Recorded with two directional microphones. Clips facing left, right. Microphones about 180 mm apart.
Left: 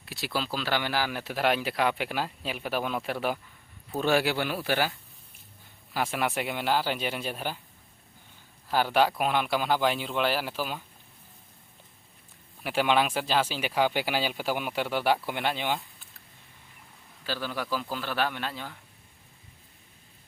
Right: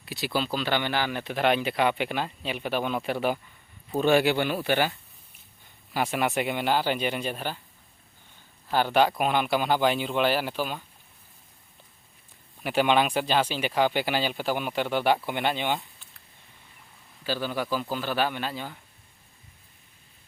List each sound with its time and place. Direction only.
0.0 s speech: centre (ahead or behind)
8.7 s speech: 5° left (ahead or behind)
12.6 s speech: centre (ahead or behind)
17.2 s speech: centre (ahead or behind)